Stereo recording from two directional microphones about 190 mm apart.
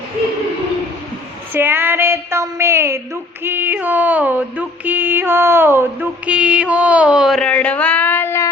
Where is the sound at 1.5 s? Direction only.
10° right (ahead or behind).